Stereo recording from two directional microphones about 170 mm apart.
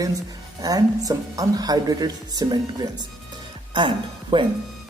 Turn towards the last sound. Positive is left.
turn(degrees=-30)  # may be behind; listen again after turning